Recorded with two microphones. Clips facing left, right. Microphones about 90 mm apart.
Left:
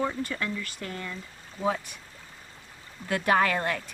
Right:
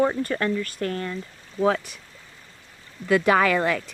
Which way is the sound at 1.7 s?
85° right.